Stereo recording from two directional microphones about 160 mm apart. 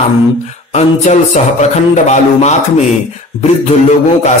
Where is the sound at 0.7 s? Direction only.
45° left (ahead or behind).